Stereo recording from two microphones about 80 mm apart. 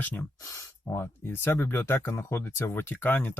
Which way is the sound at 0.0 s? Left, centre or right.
Left.